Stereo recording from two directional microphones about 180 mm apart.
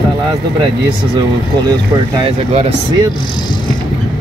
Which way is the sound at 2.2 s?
30° right (ahead or behind).